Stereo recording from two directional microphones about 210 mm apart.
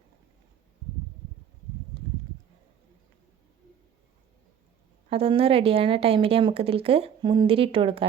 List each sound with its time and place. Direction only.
5.0 s speech: 25° right (ahead or behind)